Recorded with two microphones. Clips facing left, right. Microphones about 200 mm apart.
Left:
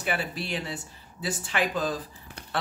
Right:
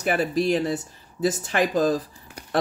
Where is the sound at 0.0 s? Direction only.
40° right (ahead or behind).